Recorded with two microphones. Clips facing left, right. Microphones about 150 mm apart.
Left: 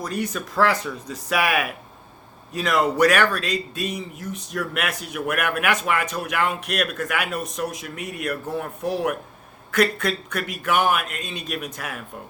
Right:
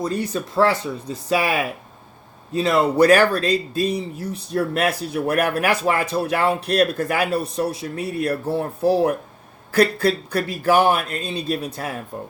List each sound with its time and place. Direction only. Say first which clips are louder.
0.0 s a man's voice: right 4 dB; 30° right (ahead or behind)